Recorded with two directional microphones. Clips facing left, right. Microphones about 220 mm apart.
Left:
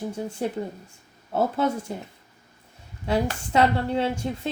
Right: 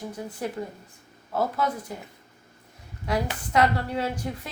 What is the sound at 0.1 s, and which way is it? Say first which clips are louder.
Speech: left 4 dB; 25° left (ahead or behind).